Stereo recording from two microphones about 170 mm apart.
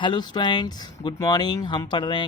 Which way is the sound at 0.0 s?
25° left (ahead or behind).